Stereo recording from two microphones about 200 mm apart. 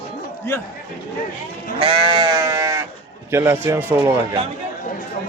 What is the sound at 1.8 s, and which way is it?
Sheep, 25° right (ahead or behind).